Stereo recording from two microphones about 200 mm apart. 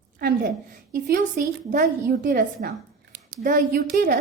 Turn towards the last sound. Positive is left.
turn(degrees=-50)  # may be behind; listen again after turning